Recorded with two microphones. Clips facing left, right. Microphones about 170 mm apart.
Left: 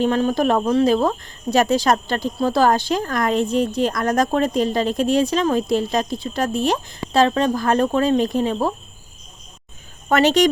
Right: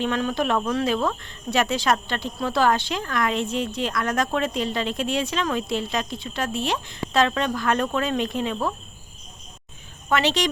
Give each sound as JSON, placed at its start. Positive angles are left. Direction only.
{"t": 0.0, "sound": "speech", "side_deg": 35}
{"t": 10.1, "sound": "speech", "side_deg": 45}